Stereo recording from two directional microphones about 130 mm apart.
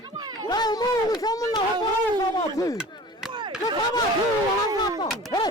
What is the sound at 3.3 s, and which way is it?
Chop, 40° right (ahead or behind).